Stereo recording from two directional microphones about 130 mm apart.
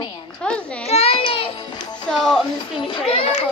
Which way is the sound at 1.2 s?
45° left (ahead or behind).